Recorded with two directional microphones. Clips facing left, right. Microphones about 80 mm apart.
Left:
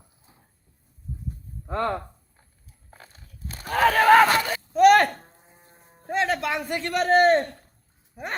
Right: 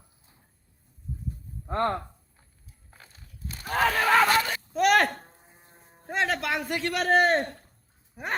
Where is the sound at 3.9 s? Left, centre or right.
Left.